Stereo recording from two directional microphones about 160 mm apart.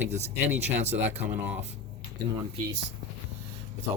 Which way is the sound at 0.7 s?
45° right (ahead or behind).